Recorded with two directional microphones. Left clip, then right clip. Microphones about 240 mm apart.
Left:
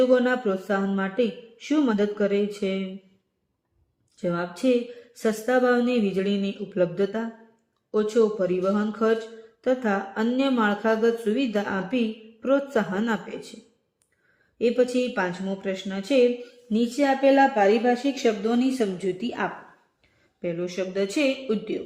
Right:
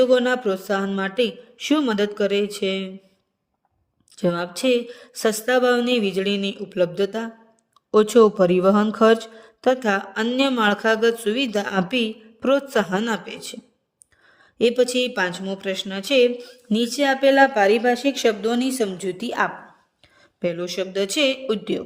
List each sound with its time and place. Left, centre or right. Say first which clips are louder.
0.0 s speech: right 3 dB; right
4.1 s speech: right 5 dB; right
14.6 s speech: right 4 dB; right